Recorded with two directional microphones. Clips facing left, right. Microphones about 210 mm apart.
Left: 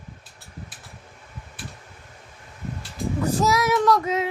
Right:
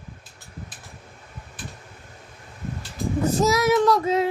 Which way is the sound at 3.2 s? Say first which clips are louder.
Right 2 dB; 25° right (ahead or behind).